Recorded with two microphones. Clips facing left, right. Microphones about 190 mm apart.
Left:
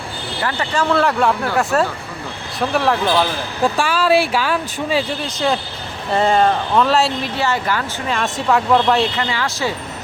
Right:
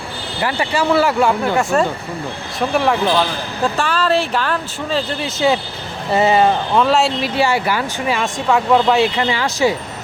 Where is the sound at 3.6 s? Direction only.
10° left (ahead or behind).